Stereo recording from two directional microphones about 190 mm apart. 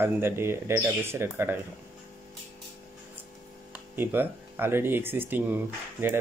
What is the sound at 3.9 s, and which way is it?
Speech, 10° right (ahead or behind).